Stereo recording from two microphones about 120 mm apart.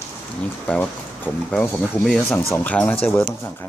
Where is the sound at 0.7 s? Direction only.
15° left (ahead or behind).